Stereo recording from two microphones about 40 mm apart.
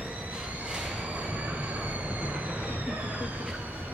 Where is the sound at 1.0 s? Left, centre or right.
Right.